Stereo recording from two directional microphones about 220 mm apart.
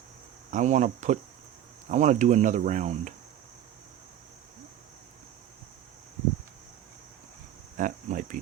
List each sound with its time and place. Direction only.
0.5 s speech: 35° right (ahead or behind)
7.8 s speech: 35° right (ahead or behind)